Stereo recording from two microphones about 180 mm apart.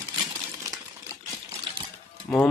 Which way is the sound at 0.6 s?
20° right (ahead or behind).